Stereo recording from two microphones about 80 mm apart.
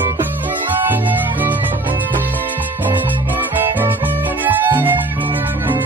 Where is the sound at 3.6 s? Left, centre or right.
Right.